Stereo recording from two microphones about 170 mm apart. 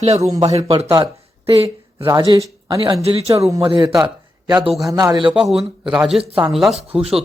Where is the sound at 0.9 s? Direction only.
20° right (ahead or behind).